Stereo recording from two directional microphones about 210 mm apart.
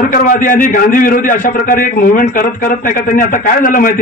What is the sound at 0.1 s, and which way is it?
A man's voice, 40° left (ahead or behind).